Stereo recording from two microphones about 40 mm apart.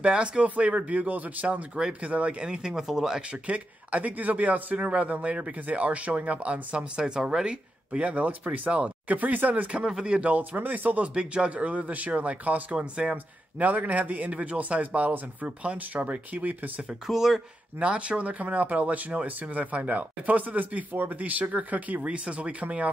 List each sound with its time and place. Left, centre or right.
0.0 s a man's voice: right
2.4 s speech: right
2.7 s speech: centre
3.4 s a man's voice: right
7.0 s speech: centre
7.9 s a man's voice: right
9.9 s speech: right
10.3 s speech: right
11.1 s a man's voice: right
12.7 s speech: right
13.1 s a man's voice: right
17.0 s speech: centre
17.7 s a man's voice: right
22.0 s a man's voice: right